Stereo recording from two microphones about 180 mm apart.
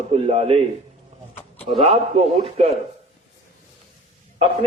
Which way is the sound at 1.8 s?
35° right (ahead or behind).